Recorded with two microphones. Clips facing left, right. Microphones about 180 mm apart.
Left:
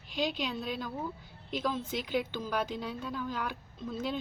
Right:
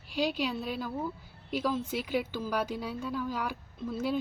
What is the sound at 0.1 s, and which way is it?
A woman's voice, 5° right (ahead or behind).